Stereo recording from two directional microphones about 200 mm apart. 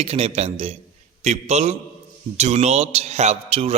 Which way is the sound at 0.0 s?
30° right (ahead or behind).